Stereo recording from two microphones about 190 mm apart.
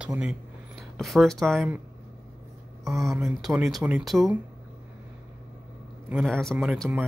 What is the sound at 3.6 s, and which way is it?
Speech, centre (ahead or behind).